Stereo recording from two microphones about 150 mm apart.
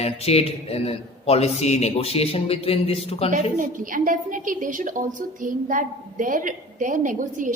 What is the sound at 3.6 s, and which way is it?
A woman's voice, 65° right (ahead or behind).